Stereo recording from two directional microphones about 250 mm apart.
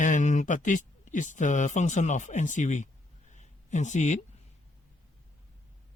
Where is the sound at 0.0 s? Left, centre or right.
Left.